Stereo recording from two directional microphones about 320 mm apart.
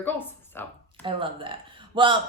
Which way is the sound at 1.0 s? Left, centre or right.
Centre.